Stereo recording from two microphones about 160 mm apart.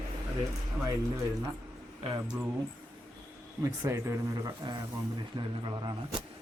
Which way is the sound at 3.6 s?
20° right (ahead or behind).